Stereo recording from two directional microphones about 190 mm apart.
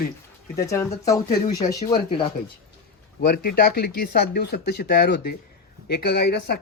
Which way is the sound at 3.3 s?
50° left (ahead or behind).